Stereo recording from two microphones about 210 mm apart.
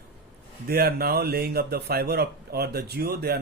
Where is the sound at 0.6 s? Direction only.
45° right (ahead or behind).